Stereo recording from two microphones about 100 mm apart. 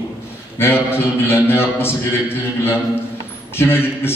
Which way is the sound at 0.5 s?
25° left (ahead or behind).